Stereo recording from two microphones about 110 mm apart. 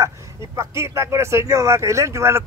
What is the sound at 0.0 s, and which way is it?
Speech, 25° right (ahead or behind).